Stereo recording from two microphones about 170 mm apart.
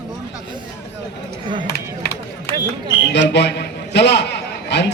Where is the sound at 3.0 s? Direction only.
90° left.